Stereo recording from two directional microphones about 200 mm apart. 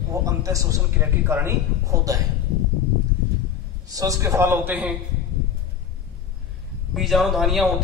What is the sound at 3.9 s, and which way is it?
A man's voice, 15° right (ahead or behind).